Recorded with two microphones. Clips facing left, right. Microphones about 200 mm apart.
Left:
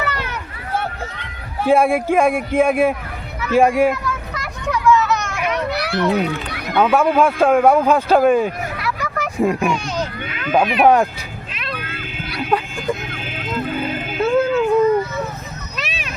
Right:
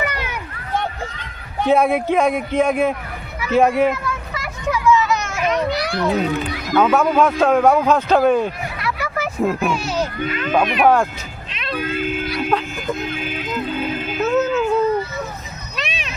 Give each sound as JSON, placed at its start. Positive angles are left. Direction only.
{"t": 0.0, "sound": "a sound", "side_deg": -15}
{"t": 1.6, "sound": "speech", "side_deg": 5}
{"t": 3.5, "sound": "hubbub", "side_deg": 5}
{"t": 5.9, "sound": "a man's voice", "side_deg": 0}
{"t": 10.8, "sound": "speech", "side_deg": 15}
{"t": 11.8, "sound": "speech", "side_deg": 60}
{"t": 12.5, "sound": "speech", "side_deg": 5}
{"t": 14.2, "sound": "music", "side_deg": 10}
{"t": 15.8, "sound": "a sound", "side_deg": 0}